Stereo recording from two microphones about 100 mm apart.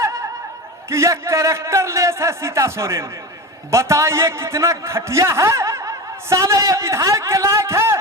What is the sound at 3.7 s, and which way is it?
A man's voice, 30° right (ahead or behind).